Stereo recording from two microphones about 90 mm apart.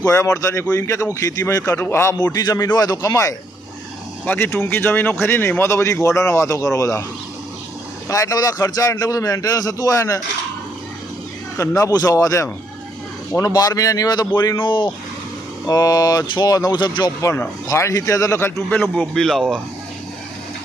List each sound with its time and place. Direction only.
0.0 s speech: 35° left (ahead or behind)
2.1 s speech: 45° left (ahead or behind)
4.3 s speech: 25° left (ahead or behind)
8.0 s speech: 40° left (ahead or behind)
11.5 s speech: 35° left (ahead or behind)
14.6 s speech: 60° left (ahead or behind)
15.6 s speech: 45° left (ahead or behind)
17.2 s speech: 35° left (ahead or behind)
18.3 s speech: 25° left (ahead or behind)
19.1 s speech: 5° left (ahead or behind)